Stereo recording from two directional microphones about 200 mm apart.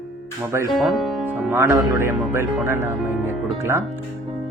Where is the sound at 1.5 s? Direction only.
15° right (ahead or behind).